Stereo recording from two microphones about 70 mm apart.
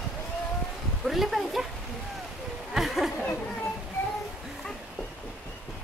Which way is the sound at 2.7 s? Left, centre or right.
Centre.